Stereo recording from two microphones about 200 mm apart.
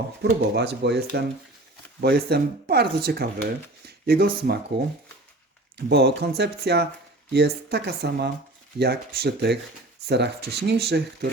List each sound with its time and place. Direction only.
0.2 s speech: 55° right (ahead or behind)
5.7 s speech: 55° right (ahead or behind)